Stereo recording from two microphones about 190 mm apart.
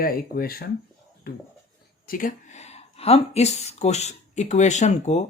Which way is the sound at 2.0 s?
45° left (ahead or behind).